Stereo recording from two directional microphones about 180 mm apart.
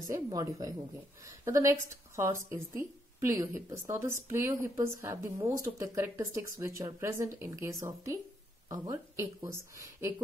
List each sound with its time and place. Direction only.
0.1 s speech: 20° right (ahead or behind)